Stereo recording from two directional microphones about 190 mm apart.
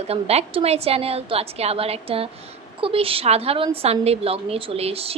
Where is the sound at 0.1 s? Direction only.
30° right (ahead or behind).